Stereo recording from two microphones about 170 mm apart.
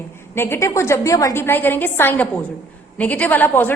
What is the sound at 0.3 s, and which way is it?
A woman's voice, 15° left (ahead or behind).